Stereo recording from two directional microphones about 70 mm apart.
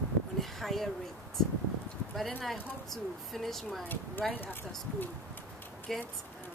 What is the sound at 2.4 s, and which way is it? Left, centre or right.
Speech, centre.